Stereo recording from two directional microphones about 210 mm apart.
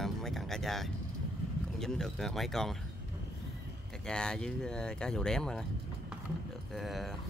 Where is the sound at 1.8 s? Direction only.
Centre (ahead or behind).